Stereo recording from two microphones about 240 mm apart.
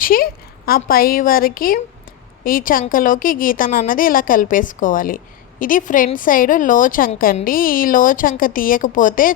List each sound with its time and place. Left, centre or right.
0.0 s a woman's voice: left